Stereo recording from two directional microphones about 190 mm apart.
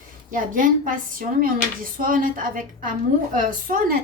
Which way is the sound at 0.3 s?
45° right (ahead or behind).